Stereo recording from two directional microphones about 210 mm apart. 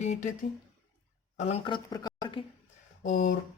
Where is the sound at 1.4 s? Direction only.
30° left (ahead or behind).